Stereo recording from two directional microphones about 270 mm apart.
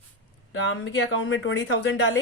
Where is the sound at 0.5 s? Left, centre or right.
Left.